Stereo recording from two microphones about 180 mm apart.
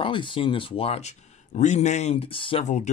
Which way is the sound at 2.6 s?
40° left (ahead or behind).